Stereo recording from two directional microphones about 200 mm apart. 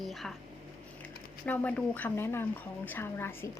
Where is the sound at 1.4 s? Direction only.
5° left (ahead or behind).